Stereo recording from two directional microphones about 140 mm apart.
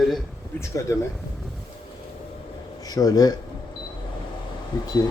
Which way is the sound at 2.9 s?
25° left (ahead or behind).